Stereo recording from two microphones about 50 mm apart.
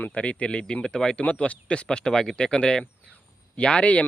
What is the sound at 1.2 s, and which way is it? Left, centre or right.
Speech, left.